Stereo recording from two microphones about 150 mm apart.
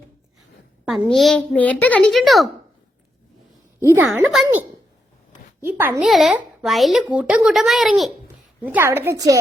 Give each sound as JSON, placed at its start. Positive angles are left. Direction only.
{"t": 1.1, "sound": "a child's voice", "side_deg": 0}
{"t": 3.8, "sound": "a woman's voice", "side_deg": -15}
{"t": 4.1, "sound": "a child's voice", "side_deg": 0}
{"t": 5.6, "sound": "a woman's voice", "side_deg": -15}
{"t": 6.0, "sound": "a child's voice", "side_deg": 0}
{"t": 8.6, "sound": "a woman's voice", "side_deg": -15}